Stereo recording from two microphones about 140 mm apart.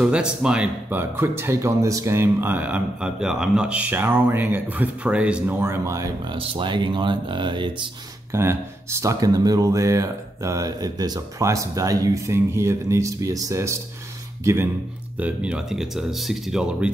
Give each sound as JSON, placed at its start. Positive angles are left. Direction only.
{"t": 0.0, "sound": "speech", "side_deg": -5}
{"t": 6.3, "sound": "speech", "side_deg": -40}
{"t": 8.3, "sound": "speech", "side_deg": -20}